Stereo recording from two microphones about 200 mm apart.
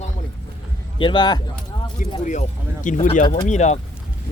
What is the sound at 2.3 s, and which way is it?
Speech, 40° left (ahead or behind).